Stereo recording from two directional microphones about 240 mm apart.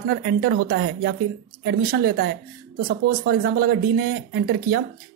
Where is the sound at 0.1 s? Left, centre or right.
Right.